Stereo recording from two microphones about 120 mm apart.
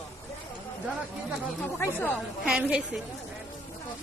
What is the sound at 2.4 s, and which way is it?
Speech, 5° right (ahead or behind).